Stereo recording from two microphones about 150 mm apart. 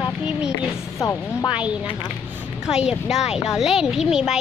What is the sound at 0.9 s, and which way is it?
Speech, 20° left (ahead or behind).